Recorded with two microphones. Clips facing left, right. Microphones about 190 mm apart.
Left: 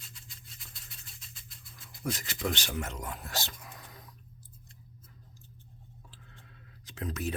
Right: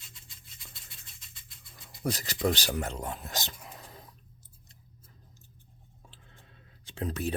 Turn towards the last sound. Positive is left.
turn(degrees=-30)  # may be behind; listen again after turning